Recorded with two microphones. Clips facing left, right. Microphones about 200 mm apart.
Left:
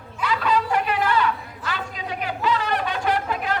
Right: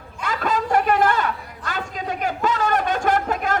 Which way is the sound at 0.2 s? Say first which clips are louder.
Left 1 dB; 45° right (ahead or behind).